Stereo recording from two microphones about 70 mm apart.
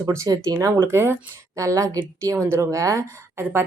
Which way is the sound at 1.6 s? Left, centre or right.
Right.